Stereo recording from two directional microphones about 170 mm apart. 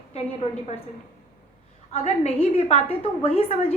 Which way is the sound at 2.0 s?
40° left (ahead or behind).